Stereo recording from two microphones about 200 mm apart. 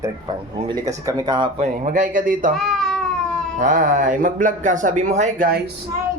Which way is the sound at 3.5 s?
40° right (ahead or behind).